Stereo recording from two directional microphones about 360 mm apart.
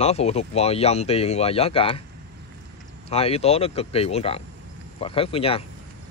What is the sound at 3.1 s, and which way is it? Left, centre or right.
Speech, centre.